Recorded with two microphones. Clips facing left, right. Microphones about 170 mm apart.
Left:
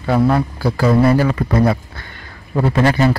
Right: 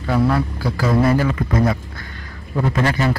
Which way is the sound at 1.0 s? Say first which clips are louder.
Left 3 dB; 30° left (ahead or behind).